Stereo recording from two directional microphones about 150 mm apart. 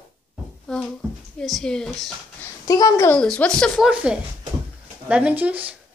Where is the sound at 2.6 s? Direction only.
25° left (ahead or behind).